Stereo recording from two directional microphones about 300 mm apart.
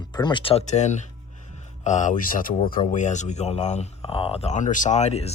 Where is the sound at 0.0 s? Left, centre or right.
Centre.